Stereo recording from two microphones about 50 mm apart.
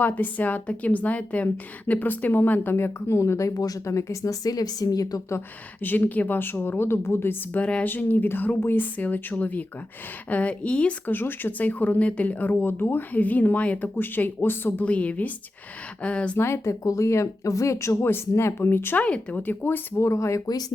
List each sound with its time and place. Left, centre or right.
0.0 s speech: left
2.8 s speech: left
5.8 s speech: left
7.6 s a woman's voice: left
7.9 s a woman's voice: left
11.0 s speech: left
14.8 s a woman's voice: left
16.4 s speech: left
18.0 s speech: left
18.9 s a woman's voice: left
19.4 s speech: left
20.0 s speech: left